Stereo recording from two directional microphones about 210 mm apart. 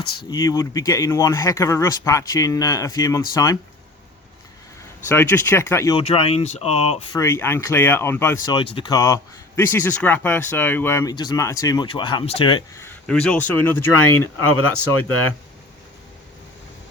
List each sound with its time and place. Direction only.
0.3 s speech: 15° left (ahead or behind)
5.0 s speech: 10° left (ahead or behind)
6.0 s speech: 25° left (ahead or behind)
7.2 s speech: 10° left (ahead or behind)
8.5 s speech: 25° left (ahead or behind)
13.1 s speech: 5° left (ahead or behind)
14.4 s speech: 80° left